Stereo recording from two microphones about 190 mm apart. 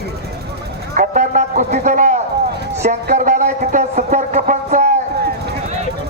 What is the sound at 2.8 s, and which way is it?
Speech, 40° right (ahead or behind).